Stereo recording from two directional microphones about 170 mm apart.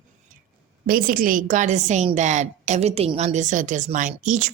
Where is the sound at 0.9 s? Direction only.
55° right (ahead or behind).